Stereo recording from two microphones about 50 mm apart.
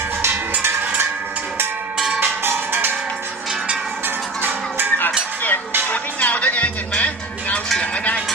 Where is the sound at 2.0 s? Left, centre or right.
Centre.